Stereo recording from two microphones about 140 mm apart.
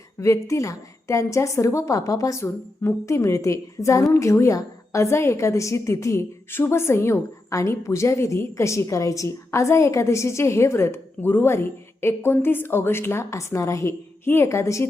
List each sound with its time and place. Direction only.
0.2 s a woman's voice: 20° left (ahead or behind)